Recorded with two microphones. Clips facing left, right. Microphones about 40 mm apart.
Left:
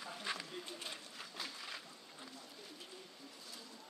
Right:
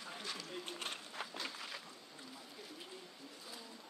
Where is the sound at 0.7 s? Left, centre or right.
Right.